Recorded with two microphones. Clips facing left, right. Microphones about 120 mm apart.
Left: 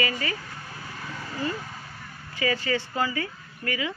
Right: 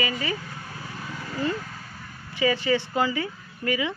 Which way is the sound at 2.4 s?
15° right (ahead or behind).